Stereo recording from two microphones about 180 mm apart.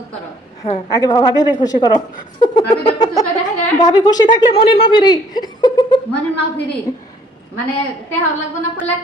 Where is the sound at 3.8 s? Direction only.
25° left (ahead or behind).